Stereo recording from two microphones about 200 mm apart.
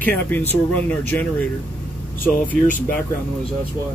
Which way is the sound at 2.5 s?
10° left (ahead or behind).